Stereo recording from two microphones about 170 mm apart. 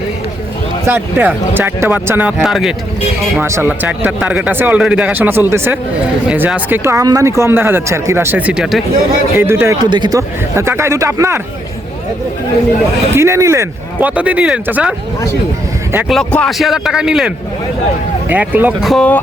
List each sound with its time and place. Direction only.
0.9 s speech: 10° right (ahead or behind)
3.3 s speech: 15° right (ahead or behind)
13.1 s speech: 15° right (ahead or behind)
16.1 s a man's voice: 5° left (ahead or behind)
18.9 s a man's voice: 5° left (ahead or behind)